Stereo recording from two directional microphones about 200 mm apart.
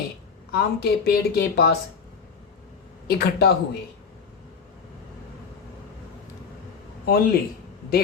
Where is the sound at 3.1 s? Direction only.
50° left (ahead or behind).